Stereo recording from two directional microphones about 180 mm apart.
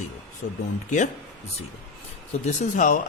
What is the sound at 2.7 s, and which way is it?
Speech, 45° left (ahead or behind).